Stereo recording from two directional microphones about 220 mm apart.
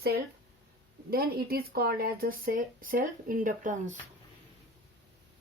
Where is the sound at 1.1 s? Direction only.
45° right (ahead or behind).